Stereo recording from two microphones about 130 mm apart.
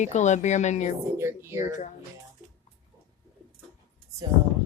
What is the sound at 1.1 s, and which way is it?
Speech, 20° right (ahead or behind).